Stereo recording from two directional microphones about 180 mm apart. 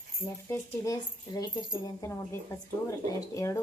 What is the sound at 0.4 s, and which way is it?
A woman's voice, 15° left (ahead or behind).